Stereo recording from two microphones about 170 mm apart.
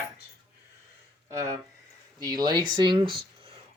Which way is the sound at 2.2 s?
25° right (ahead or behind).